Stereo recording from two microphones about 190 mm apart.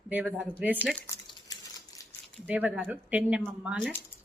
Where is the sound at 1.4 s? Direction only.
20° left (ahead or behind).